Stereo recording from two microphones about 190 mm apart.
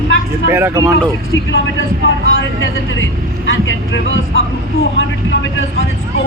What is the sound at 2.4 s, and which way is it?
Speech, 80° left.